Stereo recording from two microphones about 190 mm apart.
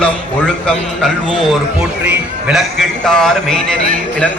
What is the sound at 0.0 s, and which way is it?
A man's voice, 5° left (ahead or behind).